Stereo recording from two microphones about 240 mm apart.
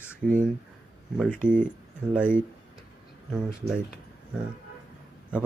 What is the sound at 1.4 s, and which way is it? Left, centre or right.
Speech, right.